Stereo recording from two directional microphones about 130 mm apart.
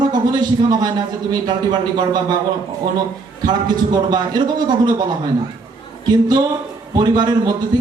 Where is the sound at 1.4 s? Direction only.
35° right (ahead or behind).